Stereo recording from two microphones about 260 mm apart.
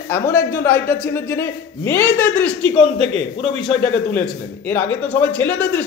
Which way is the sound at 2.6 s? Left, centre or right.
Left.